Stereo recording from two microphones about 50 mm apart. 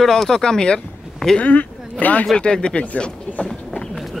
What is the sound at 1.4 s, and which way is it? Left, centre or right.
Speech, left.